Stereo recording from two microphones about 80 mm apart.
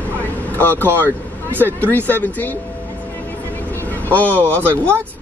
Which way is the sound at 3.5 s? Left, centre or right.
Left.